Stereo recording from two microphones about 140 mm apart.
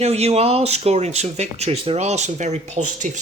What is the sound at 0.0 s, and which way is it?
Speech, 50° right (ahead or behind).